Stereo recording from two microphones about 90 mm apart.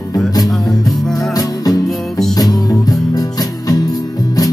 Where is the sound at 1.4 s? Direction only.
45° left (ahead or behind).